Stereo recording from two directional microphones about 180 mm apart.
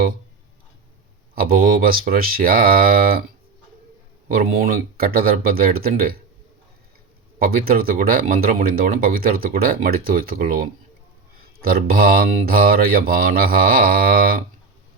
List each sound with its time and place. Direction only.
1.4 s speech: 55° right (ahead or behind)
4.3 s speech: 55° right (ahead or behind)
7.3 s speech: 55° right (ahead or behind)